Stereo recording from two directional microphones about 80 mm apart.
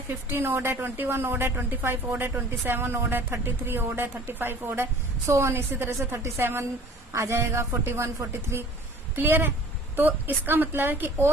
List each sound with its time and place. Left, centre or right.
0.1 s a woman's voice: right